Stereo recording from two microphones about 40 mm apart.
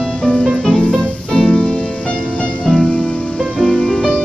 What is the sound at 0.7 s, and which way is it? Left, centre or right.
Music, centre.